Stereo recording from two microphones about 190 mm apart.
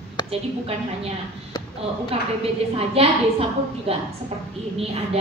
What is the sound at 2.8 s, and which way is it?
Speech, 30° right (ahead or behind).